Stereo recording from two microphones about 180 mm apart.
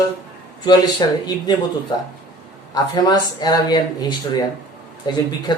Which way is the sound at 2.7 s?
20° left (ahead or behind).